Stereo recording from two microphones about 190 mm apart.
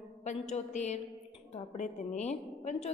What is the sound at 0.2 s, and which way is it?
A woman's voice, 40° left (ahead or behind).